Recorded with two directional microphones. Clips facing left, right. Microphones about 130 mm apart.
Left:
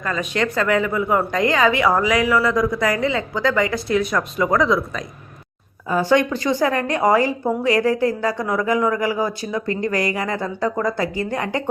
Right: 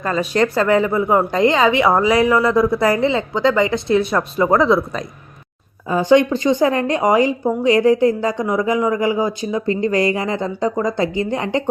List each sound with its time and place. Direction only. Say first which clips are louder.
0.0 s a woman's voice: right 5 dB; 35° right (ahead or behind)
5.9 s speech: right 4 dB; 20° right (ahead or behind)